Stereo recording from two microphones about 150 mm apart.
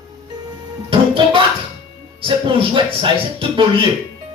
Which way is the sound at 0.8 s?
35° right (ahead or behind).